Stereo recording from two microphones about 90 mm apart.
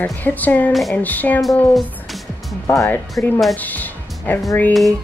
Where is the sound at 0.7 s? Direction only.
Centre (ahead or behind).